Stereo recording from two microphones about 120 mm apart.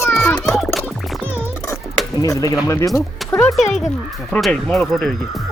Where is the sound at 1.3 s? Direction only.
20° left (ahead or behind).